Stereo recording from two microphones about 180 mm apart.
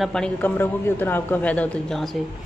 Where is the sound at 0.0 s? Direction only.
5° left (ahead or behind).